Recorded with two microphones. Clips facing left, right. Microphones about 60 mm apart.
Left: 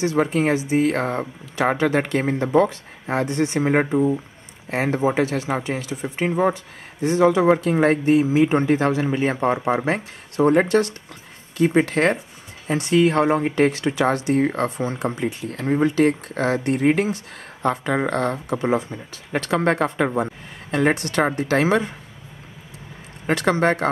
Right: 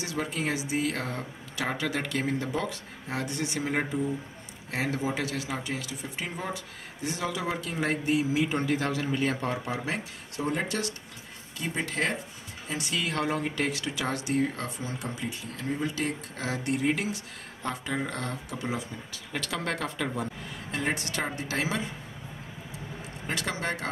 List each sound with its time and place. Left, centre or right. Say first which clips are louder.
0.0 s speech: left 12 dB; left
11.5 s a woman's voice: left 14 dB; left
12.6 s speech: left 13 dB; left
13.0 s speech: left 10 dB; left
20.7 s a woman's voice: left 11 dB; left
23.2 s speech: left 13 dB; left